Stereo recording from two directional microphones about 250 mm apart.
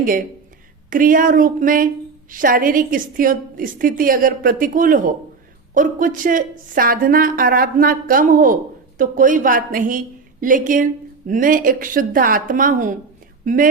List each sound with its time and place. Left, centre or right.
0.9 s a woman's voice: right